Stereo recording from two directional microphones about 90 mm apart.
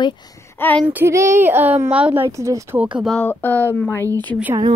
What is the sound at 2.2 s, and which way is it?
Speech, 35° right (ahead or behind).